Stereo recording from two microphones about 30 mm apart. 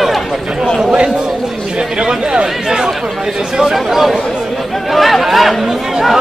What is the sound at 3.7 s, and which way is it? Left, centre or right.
Speech, centre.